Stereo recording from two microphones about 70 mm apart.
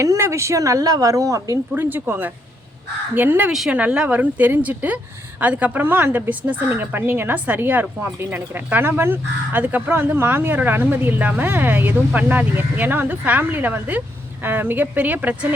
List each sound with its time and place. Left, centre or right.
0.0 s speech: right
1.7 s speech: right